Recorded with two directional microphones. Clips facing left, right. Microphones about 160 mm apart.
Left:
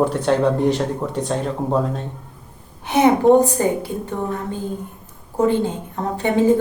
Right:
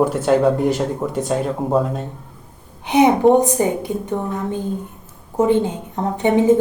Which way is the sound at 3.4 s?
20° right (ahead or behind).